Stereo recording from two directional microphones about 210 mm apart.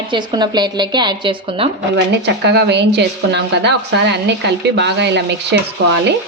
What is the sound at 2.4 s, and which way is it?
A woman's voice, 55° right (ahead or behind).